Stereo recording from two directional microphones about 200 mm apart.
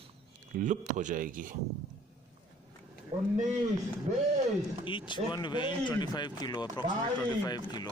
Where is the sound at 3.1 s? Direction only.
35° right (ahead or behind).